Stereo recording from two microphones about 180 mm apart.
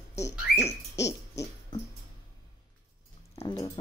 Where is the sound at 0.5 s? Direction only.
65° left (ahead or behind).